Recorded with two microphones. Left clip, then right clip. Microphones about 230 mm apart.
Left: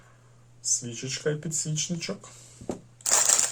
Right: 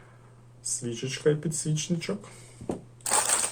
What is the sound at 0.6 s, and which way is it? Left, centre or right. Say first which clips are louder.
Speech: left 3 dB; centre.